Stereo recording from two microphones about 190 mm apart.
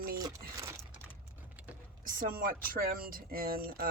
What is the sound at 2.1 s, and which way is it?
A woman's voice, 50° right (ahead or behind).